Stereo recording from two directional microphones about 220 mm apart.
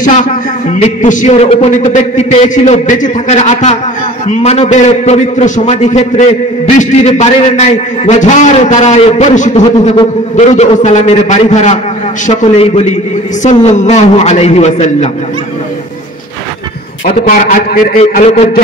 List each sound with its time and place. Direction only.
0.0 s a man's voice: 35° left (ahead or behind)
17.0 s a man's voice: 35° left (ahead or behind)